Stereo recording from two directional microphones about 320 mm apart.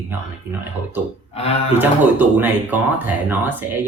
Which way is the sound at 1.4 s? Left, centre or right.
Centre.